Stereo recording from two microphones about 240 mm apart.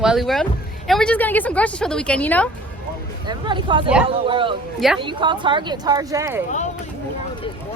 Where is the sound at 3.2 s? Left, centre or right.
Centre.